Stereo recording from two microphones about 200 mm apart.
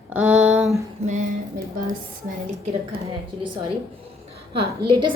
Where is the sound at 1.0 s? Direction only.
35° right (ahead or behind).